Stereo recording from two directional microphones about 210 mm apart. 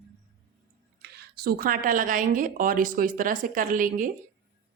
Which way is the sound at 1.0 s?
50° right (ahead or behind).